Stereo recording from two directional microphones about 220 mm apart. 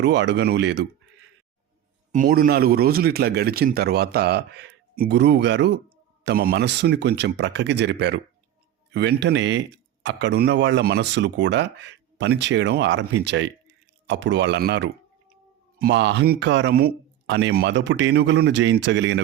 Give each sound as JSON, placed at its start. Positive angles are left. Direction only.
{"t": 0.0, "sound": "speech", "side_deg": -50}
{"t": 2.1, "sound": "speech", "side_deg": -35}